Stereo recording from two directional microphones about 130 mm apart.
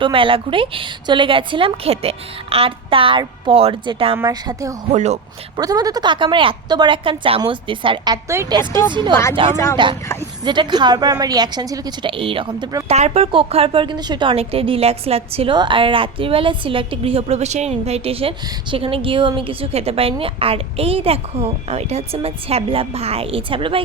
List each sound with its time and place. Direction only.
0.0 s a woman's voice: 40° right (ahead or behind)
4.2 s a woman's voice: 25° right (ahead or behind)
4.9 s speech: 65° right (ahead or behind)
5.5 s a woman's voice: 30° right (ahead or behind)
12.9 s a woman's voice: 55° right (ahead or behind)
15.5 s a woman's voice: 40° right (ahead or behind)